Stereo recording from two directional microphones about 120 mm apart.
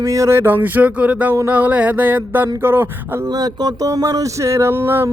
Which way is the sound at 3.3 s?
35° right (ahead or behind).